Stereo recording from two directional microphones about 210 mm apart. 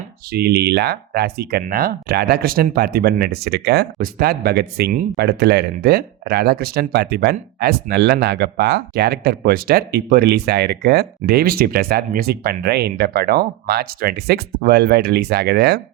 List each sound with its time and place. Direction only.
0.3 s speech: 50° right (ahead or behind)